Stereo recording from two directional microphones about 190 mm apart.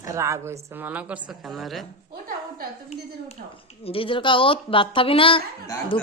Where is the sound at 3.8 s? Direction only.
30° left (ahead or behind).